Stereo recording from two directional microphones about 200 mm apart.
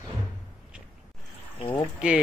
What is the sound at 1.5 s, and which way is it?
Speech, 25° left (ahead or behind).